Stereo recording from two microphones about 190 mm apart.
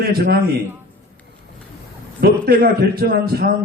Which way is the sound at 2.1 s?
50° right (ahead or behind).